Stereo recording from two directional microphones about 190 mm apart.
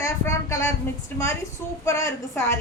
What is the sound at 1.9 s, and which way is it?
Speech, 15° left (ahead or behind).